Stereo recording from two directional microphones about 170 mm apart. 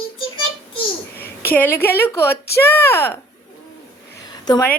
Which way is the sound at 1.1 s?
65° left (ahead or behind).